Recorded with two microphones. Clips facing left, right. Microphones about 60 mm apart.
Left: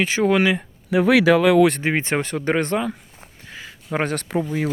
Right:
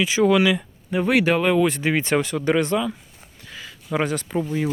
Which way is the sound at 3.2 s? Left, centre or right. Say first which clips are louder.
Left 1 dB; left.